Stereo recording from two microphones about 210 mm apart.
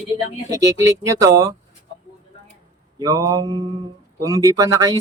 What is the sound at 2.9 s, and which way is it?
Speech, 20° right (ahead or behind).